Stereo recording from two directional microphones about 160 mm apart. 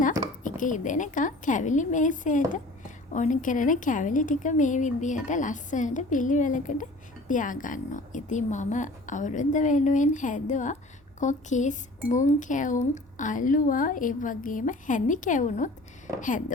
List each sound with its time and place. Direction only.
0.4 s a woman's voice: 55° left (ahead or behind)